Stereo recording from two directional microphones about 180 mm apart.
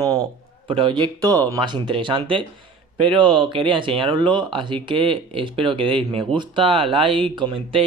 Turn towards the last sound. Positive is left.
turn(degrees=-30)  # may be behind; listen again after turning